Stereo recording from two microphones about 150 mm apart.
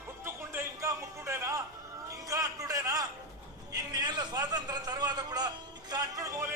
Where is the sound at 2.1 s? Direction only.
20° right (ahead or behind).